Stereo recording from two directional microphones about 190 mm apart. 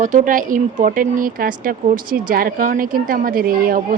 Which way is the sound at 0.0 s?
45° right (ahead or behind).